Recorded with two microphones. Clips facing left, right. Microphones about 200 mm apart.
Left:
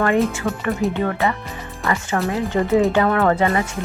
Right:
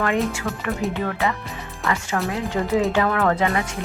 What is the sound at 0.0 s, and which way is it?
Speech, centre (ahead or behind).